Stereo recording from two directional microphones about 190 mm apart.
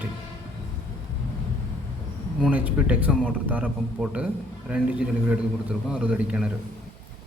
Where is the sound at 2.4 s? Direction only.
5° right (ahead or behind).